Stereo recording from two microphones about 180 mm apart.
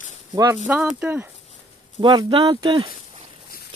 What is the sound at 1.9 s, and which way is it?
Speech, 25° right (ahead or behind).